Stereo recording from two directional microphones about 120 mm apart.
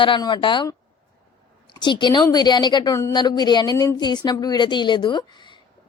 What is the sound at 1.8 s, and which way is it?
A woman's voice, 40° left (ahead or behind).